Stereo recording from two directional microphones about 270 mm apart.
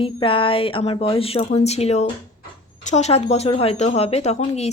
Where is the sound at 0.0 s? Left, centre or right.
Centre.